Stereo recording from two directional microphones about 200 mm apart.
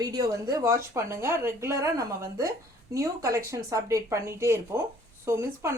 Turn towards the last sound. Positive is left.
turn(degrees=-15)  # may be behind; listen again after turning